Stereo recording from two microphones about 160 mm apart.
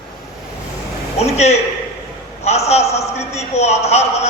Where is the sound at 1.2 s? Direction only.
40° left (ahead or behind).